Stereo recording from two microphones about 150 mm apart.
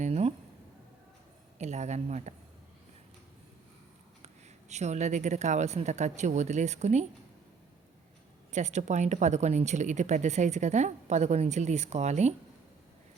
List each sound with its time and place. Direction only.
0.0 s a sound: 45° right (ahead or behind)
1.5 s a woman's voice: 50° right (ahead or behind)
4.7 s a woman's voice: 50° right (ahead or behind)
8.5 s a woman's voice: 50° right (ahead or behind)